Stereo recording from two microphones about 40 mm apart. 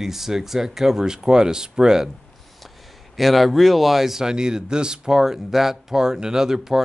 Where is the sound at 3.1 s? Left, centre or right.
Centre.